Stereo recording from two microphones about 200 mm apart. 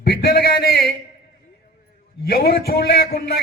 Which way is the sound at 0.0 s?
50° left (ahead or behind).